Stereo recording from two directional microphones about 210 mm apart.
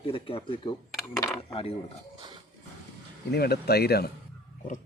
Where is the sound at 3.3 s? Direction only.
50° left (ahead or behind).